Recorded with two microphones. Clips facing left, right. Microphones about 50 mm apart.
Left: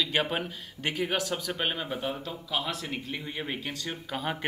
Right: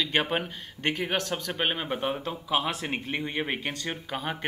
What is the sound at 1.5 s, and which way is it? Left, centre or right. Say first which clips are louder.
Speech: right 3 dB; right.